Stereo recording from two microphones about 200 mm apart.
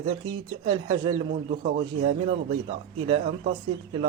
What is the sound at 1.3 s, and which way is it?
Speech, 40° right (ahead or behind).